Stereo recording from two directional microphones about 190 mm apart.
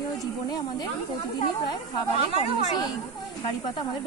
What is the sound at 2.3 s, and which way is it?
Speech, 20° left (ahead or behind).